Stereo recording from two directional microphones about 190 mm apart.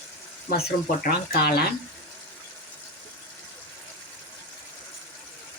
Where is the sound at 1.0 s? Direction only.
50° left (ahead or behind).